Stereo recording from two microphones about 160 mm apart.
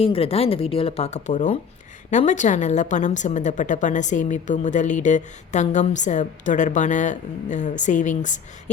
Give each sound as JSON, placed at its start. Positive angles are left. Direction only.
{"t": 0.0, "sound": "a woman's voice", "side_deg": 35}